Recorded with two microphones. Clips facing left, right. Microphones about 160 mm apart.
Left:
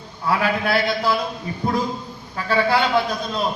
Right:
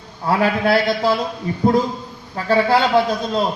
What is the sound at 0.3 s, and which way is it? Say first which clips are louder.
Speech: right 4 dB; 40° right (ahead or behind).